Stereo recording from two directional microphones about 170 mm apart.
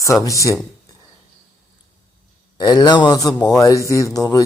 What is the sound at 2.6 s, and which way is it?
Speech, 25° left (ahead or behind).